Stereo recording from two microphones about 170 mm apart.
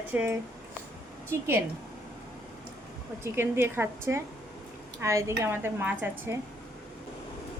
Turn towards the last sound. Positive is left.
turn(degrees=-10)  # may be behind; listen again after turning